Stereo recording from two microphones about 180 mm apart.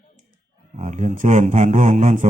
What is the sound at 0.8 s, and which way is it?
Speech, 40° right (ahead or behind).